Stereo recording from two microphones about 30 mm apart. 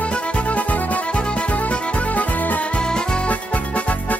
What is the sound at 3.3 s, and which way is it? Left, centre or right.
Music, left.